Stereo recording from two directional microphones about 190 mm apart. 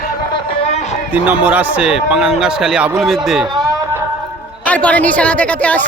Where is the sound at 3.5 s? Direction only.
20° right (ahead or behind).